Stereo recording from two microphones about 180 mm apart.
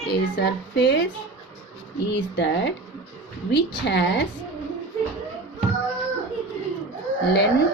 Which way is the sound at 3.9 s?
75° left (ahead or behind).